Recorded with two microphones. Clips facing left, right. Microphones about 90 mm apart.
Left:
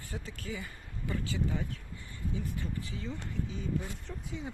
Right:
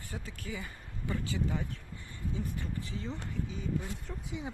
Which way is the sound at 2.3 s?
20° right (ahead or behind).